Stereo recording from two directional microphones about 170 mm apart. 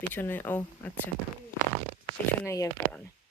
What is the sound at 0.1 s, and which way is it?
Speech, 10° left (ahead or behind).